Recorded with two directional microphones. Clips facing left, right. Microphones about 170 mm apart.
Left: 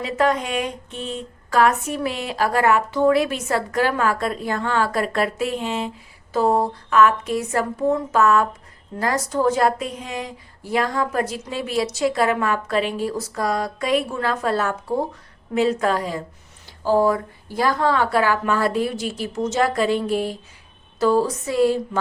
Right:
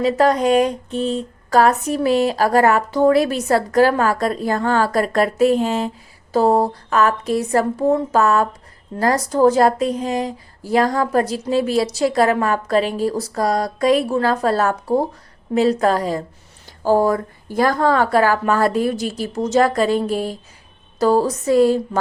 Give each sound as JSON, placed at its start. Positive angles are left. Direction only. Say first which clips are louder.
{"t": 0.0, "sound": "a woman's voice", "louder": "right 5 dB", "side_deg": -35}